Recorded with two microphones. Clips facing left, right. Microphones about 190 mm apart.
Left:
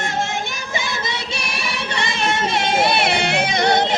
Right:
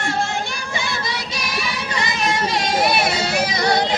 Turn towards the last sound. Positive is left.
turn(degrees=25)  # may be behind; listen again after turning